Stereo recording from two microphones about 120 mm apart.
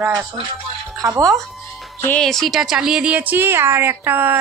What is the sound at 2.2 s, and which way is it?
Speech, centre (ahead or behind).